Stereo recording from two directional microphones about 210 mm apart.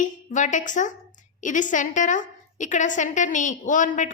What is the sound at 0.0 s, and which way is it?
A woman's voice, 35° left (ahead or behind).